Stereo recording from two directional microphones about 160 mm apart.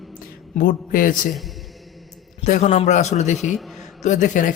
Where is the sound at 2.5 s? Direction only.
50° left (ahead or behind).